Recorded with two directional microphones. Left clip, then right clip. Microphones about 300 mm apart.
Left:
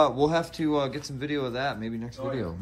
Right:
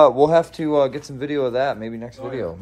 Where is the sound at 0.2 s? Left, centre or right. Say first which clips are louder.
Right 9 dB; centre.